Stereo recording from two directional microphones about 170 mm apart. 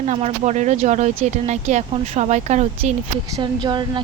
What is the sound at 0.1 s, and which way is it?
Speech, 40° right (ahead or behind).